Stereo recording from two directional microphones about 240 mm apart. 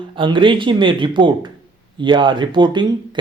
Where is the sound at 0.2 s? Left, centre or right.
Right.